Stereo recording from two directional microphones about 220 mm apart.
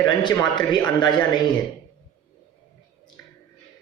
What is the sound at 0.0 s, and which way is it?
A man's voice, 20° left (ahead or behind).